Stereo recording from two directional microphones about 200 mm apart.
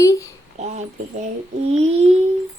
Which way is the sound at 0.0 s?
15° left (ahead or behind).